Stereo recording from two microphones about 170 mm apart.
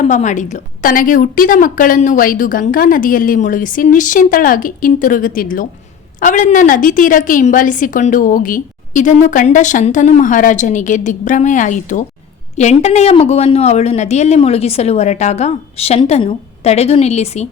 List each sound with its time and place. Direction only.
0.0 s a woman's voice: 45° left (ahead or behind)